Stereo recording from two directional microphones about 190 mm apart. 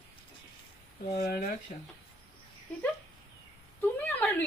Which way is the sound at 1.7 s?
40° left (ahead or behind).